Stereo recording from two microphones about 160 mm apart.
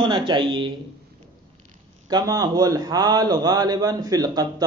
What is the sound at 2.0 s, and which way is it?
A man's voice, 25° right (ahead or behind).